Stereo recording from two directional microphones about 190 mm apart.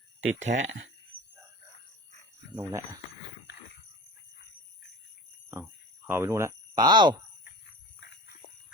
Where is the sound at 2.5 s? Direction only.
15° right (ahead or behind).